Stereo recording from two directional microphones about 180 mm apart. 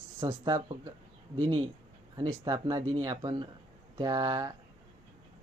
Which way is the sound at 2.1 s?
20° right (ahead or behind).